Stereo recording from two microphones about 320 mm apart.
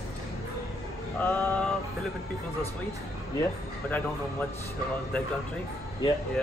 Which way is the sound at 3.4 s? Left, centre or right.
Centre.